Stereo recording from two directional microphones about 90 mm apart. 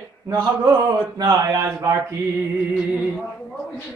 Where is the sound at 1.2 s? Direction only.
45° right (ahead or behind).